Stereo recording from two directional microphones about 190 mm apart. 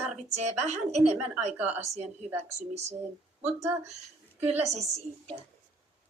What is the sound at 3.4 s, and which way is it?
Speech, 15° right (ahead or behind).